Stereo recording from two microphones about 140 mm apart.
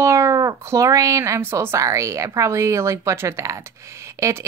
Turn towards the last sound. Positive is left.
turn(degrees=-20)  # may be behind; listen again after turning